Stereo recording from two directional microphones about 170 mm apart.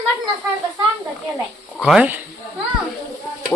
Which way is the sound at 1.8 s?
5° right (ahead or behind).